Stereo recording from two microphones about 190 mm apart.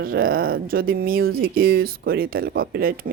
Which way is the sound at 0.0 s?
50° right (ahead or behind).